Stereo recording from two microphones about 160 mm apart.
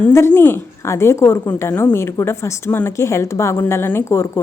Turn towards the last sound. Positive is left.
turn(degrees=15)  # may be behind; listen again after turning